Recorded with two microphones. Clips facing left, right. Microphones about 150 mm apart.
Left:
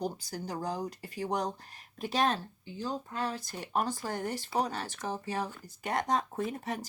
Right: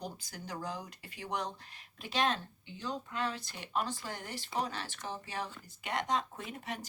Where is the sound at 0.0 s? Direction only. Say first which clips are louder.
Left 8 dB; 35° left (ahead or behind).